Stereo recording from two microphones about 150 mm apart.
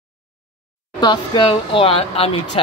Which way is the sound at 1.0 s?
30° left (ahead or behind).